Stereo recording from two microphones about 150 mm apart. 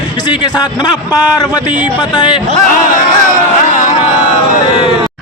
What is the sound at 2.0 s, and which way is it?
Speech, 30° left (ahead or behind).